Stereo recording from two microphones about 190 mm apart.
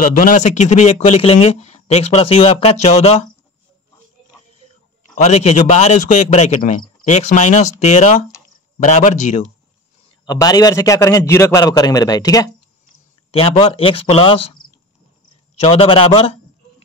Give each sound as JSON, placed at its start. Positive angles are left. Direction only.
{"t": 0.0, "sound": "speech", "side_deg": 45}
{"t": 5.1, "sound": "speech", "side_deg": 35}
{"t": 10.2, "sound": "a man's voice", "side_deg": 20}
{"t": 13.3, "sound": "a man's voice", "side_deg": 30}